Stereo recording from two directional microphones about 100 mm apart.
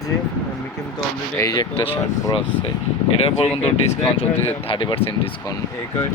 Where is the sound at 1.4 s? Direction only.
40° left (ahead or behind).